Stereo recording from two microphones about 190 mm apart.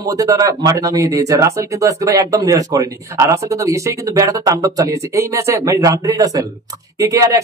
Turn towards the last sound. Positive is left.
turn(degrees=-15)  # may be behind; listen again after turning